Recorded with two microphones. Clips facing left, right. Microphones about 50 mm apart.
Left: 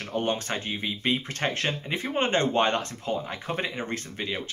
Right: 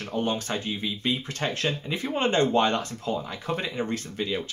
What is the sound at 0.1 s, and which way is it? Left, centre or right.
Speech, left.